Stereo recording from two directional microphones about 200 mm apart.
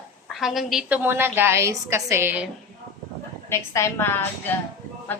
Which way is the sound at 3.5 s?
15° left (ahead or behind).